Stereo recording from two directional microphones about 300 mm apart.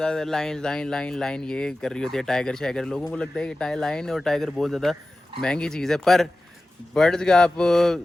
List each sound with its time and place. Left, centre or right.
0.0 s speech: centre